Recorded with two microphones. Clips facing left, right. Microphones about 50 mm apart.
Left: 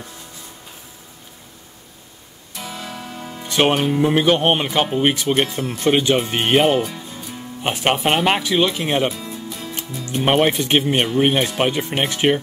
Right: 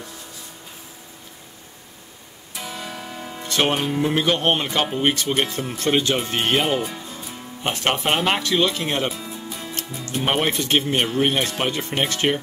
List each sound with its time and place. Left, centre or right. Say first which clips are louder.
2.5 s music: left 1 dB; centre
3.4 s speech: left 4 dB; centre
9.1 s music: left 2 dB; centre
10.0 s speech: left 5 dB; centre